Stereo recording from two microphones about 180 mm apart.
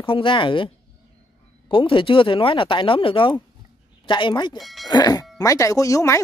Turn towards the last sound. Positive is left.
turn(degrees=15)  # may be behind; listen again after turning